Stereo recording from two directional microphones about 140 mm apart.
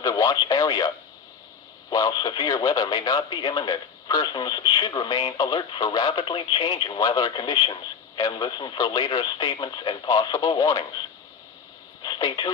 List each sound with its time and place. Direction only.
0.0 s speech: 25° left (ahead or behind)
1.9 s speech: 25° left (ahead or behind)
12.0 s speech: 30° left (ahead or behind)